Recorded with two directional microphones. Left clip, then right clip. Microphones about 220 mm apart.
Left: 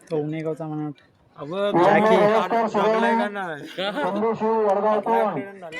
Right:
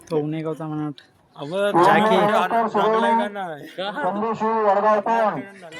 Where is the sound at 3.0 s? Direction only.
5° left (ahead or behind).